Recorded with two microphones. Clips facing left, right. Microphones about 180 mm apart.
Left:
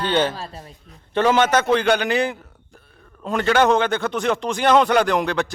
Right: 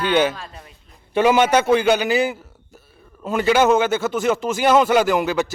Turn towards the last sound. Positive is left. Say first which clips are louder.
# right 2 dB
turn(degrees=-5)  # may be behind; listen again after turning